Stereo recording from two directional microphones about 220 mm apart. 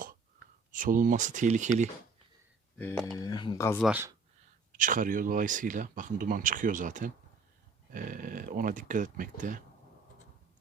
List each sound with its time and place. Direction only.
0.7 s speech: 35° right (ahead or behind)
2.7 s speech: 5° left (ahead or behind)
3.2 s speech: 20° left (ahead or behind)
3.8 s speech: 10° right (ahead or behind)
4.8 s speech: 35° right (ahead or behind)